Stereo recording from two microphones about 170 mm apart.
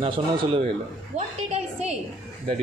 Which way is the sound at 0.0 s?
35° right (ahead or behind).